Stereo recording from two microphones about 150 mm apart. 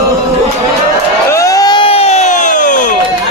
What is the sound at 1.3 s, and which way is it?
Crowd, 20° left (ahead or behind).